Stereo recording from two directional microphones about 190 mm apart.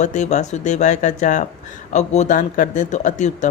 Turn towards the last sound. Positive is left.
turn(degrees=40)  # may be behind; listen again after turning